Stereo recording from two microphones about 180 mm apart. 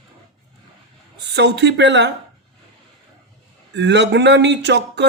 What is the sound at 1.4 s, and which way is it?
Speech, 75° right (ahead or behind).